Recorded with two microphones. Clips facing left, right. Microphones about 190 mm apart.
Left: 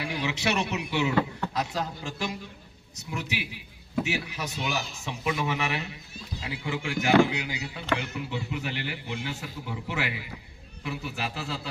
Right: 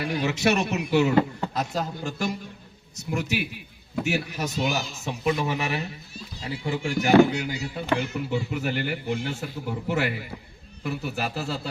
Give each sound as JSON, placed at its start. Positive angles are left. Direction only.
{"t": 0.0, "sound": "speech", "side_deg": -45}